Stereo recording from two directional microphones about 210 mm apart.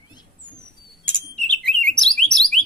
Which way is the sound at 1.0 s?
5° left (ahead or behind).